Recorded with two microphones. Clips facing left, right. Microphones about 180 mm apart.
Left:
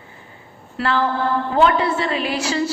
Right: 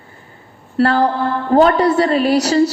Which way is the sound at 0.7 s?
40° right (ahead or behind).